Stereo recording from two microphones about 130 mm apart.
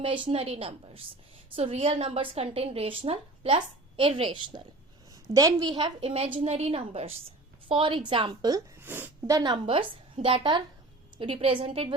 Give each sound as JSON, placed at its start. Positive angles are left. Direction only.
{"t": 0.0, "sound": "a woman's voice", "side_deg": -45}
{"t": 5.1, "sound": "a woman's voice", "side_deg": -30}
{"t": 8.8, "sound": "a sound", "side_deg": -15}
{"t": 9.3, "sound": "a woman's voice", "side_deg": -35}